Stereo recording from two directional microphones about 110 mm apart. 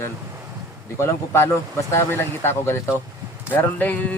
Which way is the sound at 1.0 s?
25° left (ahead or behind).